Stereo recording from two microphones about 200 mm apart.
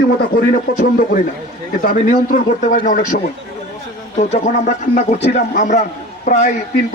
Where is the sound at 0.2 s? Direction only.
45° left (ahead or behind).